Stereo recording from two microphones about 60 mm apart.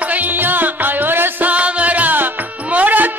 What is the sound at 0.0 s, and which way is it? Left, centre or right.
Music, right.